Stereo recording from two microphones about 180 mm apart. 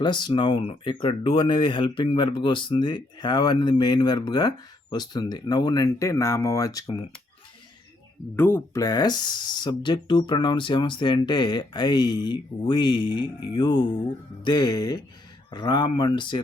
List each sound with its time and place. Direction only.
0.0 s speech: 25° left (ahead or behind)
8.4 s speech: 10° left (ahead or behind); by 16.4 s 25° left (ahead or behind)